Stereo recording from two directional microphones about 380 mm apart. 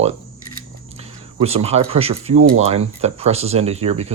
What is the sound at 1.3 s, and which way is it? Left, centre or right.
Speech, centre.